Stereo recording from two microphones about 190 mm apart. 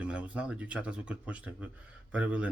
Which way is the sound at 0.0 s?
5° right (ahead or behind).